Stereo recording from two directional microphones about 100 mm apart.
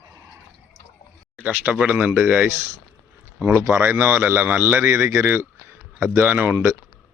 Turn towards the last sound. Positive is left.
turn(degrees=-20)  # may be behind; listen again after turning